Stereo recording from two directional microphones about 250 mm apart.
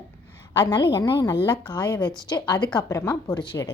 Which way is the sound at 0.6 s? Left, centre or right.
Centre.